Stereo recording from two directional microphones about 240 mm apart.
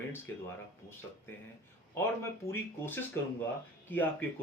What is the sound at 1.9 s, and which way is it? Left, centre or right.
Speech, centre.